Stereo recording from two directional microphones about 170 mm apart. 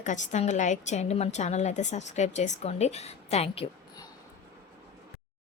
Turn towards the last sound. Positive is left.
turn(degrees=35)  # may be behind; listen again after turning